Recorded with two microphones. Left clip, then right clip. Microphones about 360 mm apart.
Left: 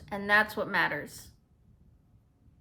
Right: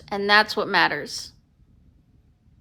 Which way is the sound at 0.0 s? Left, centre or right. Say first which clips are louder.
Right 7 dB; centre.